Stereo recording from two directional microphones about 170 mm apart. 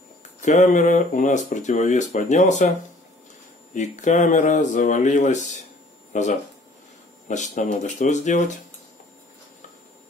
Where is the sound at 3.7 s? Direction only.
45° left (ahead or behind).